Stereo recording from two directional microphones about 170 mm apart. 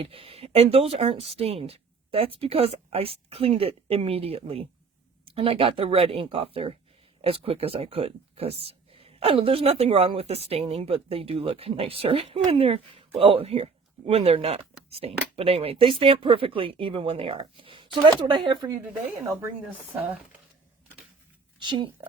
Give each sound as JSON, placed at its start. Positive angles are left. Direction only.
{"t": 0.0, "sound": "speech", "side_deg": -35}
{"t": 21.6, "sound": "speech", "side_deg": -25}